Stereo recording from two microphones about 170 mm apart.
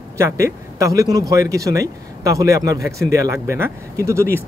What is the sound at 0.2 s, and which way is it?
Speech, 20° right (ahead or behind).